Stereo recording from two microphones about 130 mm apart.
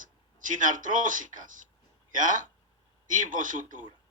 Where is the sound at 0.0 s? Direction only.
85° right.